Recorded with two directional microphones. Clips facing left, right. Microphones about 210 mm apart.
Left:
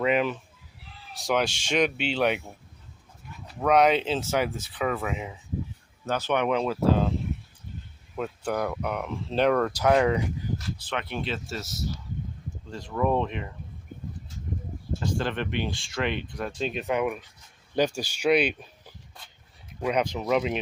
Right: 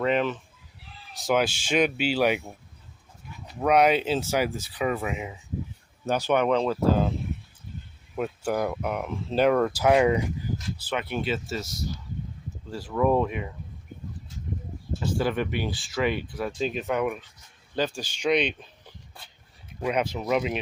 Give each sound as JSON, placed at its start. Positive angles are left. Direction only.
{"t": 0.0, "sound": "a sound", "side_deg": 5}
{"t": 1.1, "sound": "speech", "side_deg": 0}
{"t": 3.6, "sound": "speech", "side_deg": -5}
{"t": 6.3, "sound": "speech", "side_deg": 5}
{"t": 8.1, "sound": "speech", "side_deg": -10}
{"t": 15.0, "sound": "speech", "side_deg": -10}
{"t": 19.8, "sound": "speech", "side_deg": -5}